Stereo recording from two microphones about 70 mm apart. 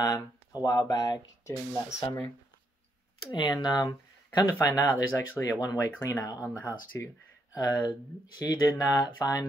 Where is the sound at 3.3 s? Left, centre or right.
Left.